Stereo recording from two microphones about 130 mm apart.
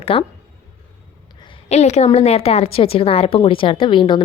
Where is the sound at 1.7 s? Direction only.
60° left (ahead or behind).